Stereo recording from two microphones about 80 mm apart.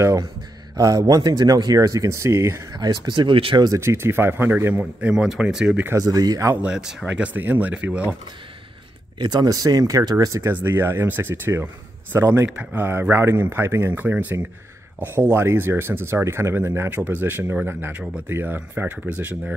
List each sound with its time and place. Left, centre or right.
0.0 s speech: right
1.8 s speech: right
2.7 s speech: right
3.8 s speech: right
5.1 s speech: centre
5.9 s speech: right
6.6 s speech: centre
7.1 s speech: centre
9.2 s speech: right
9.5 s speech: right
10.5 s speech: right
15.3 s speech: right